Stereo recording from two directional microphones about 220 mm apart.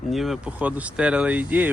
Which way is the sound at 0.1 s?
Centre (ahead or behind).